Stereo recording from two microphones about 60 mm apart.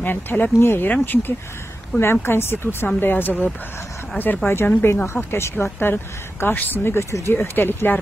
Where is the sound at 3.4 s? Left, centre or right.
Left.